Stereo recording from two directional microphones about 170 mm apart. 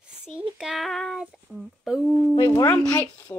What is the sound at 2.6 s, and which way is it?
Speech, 15° left (ahead or behind).